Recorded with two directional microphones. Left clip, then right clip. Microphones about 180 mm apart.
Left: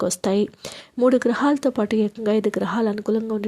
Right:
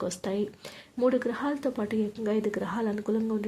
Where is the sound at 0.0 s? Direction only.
40° left (ahead or behind).